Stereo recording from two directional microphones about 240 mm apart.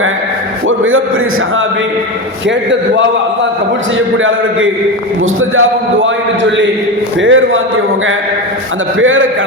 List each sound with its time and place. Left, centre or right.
4.2 s a man's voice: right
9.0 s a man's voice: right